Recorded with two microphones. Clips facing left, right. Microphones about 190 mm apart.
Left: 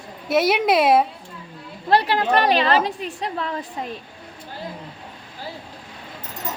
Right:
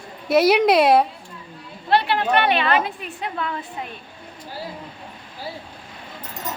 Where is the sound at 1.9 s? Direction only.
35° left (ahead or behind).